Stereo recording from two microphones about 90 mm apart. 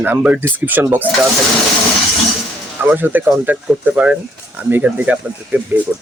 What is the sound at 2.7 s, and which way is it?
Speech, 20° right (ahead or behind).